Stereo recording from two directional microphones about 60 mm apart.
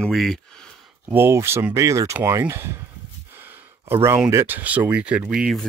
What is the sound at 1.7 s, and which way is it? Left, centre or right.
Speech, right.